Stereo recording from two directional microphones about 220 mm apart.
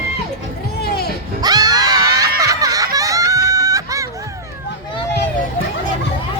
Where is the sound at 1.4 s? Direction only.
15° right (ahead or behind).